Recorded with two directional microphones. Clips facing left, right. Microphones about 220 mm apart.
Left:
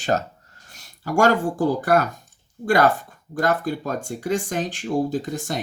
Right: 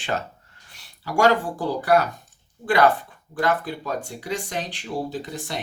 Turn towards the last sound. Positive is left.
turn(degrees=45)  # may be behind; listen again after turning